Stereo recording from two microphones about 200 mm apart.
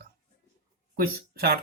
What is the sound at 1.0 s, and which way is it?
Speech, 50° right (ahead or behind).